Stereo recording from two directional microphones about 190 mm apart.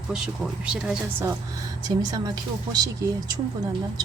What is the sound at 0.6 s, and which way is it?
Speech, 5° right (ahead or behind).